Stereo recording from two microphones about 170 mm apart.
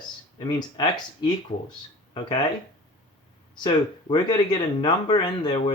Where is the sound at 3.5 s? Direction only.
25° left (ahead or behind).